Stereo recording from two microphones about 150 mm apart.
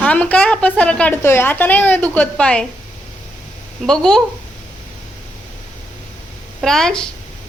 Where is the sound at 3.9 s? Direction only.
5° left (ahead or behind).